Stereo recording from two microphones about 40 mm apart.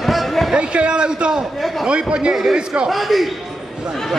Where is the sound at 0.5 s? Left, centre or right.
Right.